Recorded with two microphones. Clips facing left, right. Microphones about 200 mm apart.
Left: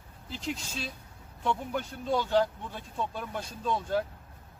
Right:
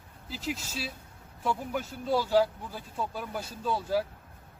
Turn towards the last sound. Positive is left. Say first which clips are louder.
# right 1 dB
turn(degrees=-5)  # may be behind; listen again after turning